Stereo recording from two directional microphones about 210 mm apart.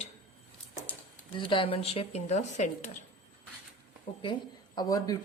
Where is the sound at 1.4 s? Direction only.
25° left (ahead or behind).